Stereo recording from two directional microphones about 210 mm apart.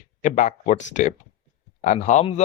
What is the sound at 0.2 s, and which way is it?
Speech, 35° left (ahead or behind).